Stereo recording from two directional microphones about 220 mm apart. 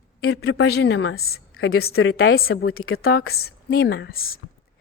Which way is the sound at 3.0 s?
45° left (ahead or behind).